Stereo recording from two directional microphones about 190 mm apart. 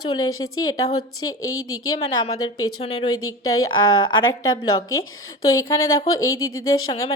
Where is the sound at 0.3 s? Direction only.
90° left.